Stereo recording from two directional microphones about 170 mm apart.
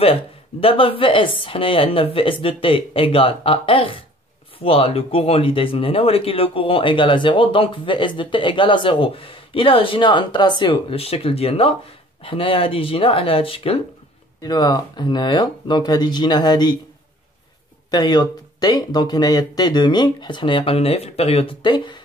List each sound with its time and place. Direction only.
0.0 s speech: 35° left (ahead or behind)
14.4 s speech: 25° left (ahead or behind)
17.9 s speech: 25° left (ahead or behind)